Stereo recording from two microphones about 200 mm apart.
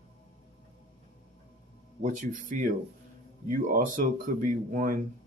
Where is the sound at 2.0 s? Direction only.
40° right (ahead or behind).